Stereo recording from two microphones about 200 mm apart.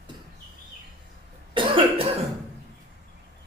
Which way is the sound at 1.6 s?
25° right (ahead or behind).